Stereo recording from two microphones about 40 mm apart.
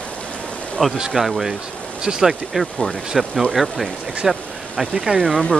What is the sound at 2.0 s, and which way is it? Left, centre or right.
Speech, centre.